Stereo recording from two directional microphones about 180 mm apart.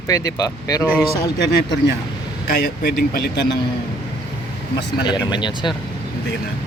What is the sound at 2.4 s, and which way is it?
Speech, 65° left (ahead or behind).